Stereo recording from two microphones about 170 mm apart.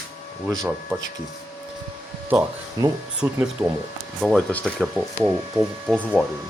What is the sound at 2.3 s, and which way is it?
Speech, 20° right (ahead or behind).